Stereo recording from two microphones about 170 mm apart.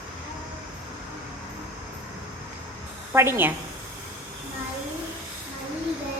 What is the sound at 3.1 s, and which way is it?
Speech, 15° right (ahead or behind).